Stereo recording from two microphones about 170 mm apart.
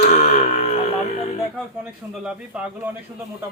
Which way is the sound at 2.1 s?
5° right (ahead or behind).